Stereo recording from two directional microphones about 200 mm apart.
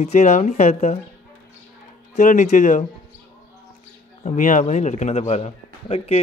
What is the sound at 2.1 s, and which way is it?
Speech, 35° left (ahead or behind).